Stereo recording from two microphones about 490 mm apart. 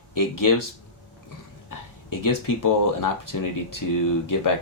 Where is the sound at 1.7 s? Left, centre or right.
Left.